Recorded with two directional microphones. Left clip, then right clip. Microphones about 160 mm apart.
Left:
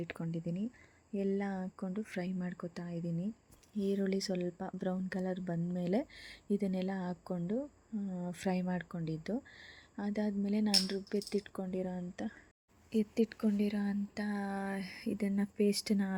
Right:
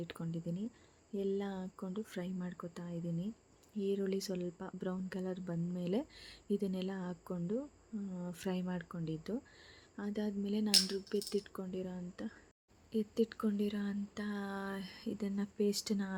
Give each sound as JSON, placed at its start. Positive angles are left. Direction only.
{"t": 0.0, "sound": "speech", "side_deg": 10}